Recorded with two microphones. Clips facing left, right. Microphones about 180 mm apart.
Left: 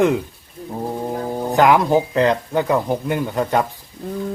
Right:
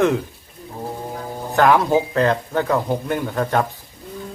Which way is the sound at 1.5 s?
15° left (ahead or behind).